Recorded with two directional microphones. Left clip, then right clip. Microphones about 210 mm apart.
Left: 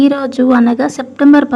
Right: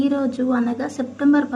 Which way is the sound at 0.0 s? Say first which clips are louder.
Left 9 dB; 40° left (ahead or behind).